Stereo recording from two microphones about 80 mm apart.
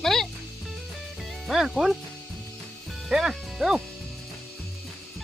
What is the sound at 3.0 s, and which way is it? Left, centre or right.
Speech, centre.